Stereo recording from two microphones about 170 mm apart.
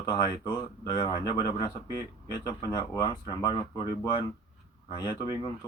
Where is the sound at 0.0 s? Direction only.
30° left (ahead or behind).